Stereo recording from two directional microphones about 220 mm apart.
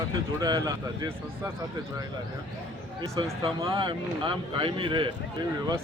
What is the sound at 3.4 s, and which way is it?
Speech, 25° right (ahead or behind).